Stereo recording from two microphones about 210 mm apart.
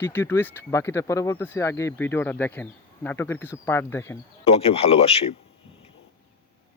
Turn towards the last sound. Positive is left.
turn(degrees=30)  # may be behind; listen again after turning